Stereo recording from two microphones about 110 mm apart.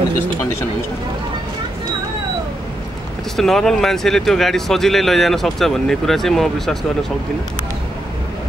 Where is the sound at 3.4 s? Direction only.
5° left (ahead or behind).